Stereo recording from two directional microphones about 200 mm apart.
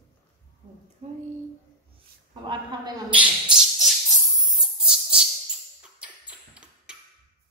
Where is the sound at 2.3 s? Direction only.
20° right (ahead or behind).